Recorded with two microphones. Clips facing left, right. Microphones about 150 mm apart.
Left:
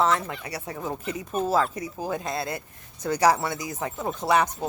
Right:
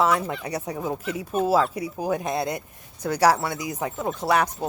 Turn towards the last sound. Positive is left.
turn(degrees=-5)  # may be behind; listen again after turning